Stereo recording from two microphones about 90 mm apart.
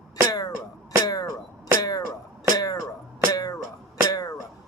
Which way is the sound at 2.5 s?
45° left (ahead or behind).